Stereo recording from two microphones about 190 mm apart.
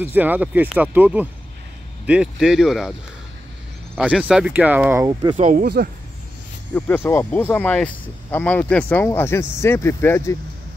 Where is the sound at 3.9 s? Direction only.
5° right (ahead or behind).